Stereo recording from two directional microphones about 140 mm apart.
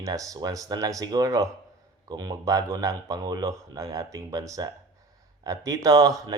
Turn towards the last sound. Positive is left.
turn(degrees=-25)  # may be behind; listen again after turning